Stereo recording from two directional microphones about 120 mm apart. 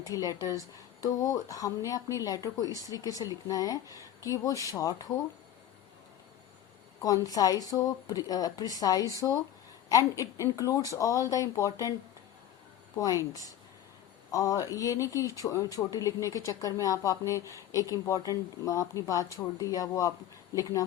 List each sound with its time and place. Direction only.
0.1 s speech: 30° left (ahead or behind)
7.0 s speech: 30° left (ahead or behind)
13.1 s speech: 30° left (ahead or behind)